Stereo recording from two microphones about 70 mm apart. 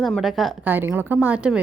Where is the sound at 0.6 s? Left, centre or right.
Right.